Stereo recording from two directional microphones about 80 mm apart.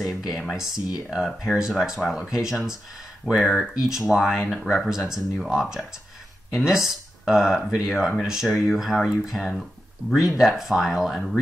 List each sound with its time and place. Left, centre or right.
0.0 s speech: centre
3.7 s speech: centre